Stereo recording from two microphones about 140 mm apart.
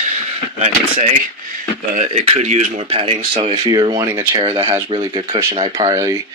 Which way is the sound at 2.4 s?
55° right (ahead or behind).